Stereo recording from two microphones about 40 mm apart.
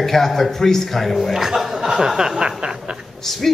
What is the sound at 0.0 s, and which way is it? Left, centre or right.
A man's voice, centre.